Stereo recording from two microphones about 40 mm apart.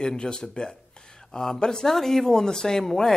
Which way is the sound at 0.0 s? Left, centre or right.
Centre.